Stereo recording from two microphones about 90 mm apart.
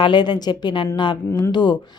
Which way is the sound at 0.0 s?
55° left (ahead or behind).